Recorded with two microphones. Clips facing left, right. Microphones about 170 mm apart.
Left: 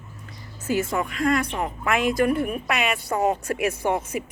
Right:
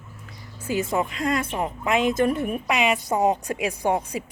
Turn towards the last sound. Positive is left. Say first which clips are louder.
# even
turn(degrees=-15)  # may be behind; listen again after turning